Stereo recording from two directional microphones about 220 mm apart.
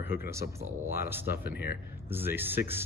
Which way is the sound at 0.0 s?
10° right (ahead or behind).